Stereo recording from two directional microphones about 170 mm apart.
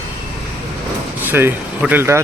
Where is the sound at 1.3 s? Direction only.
10° right (ahead or behind).